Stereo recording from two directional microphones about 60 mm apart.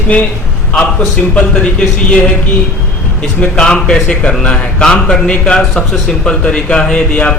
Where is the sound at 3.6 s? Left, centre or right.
Centre.